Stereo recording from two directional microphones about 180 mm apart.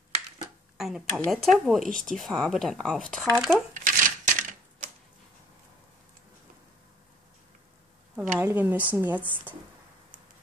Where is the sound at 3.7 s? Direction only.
45° right (ahead or behind).